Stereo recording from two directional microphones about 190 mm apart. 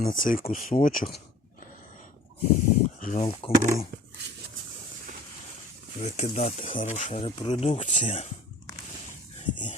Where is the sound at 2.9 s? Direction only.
40° left (ahead or behind).